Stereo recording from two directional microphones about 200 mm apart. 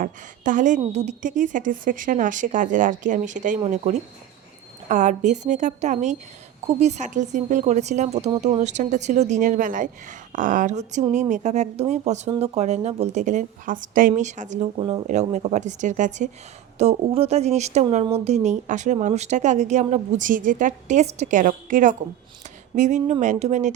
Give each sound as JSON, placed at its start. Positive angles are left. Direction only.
{"t": 0.0, "sound": "speech", "side_deg": -40}
{"t": 15.0, "sound": "speech", "side_deg": -35}